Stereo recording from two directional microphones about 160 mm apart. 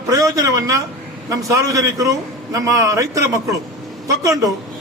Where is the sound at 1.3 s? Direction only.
20° right (ahead or behind).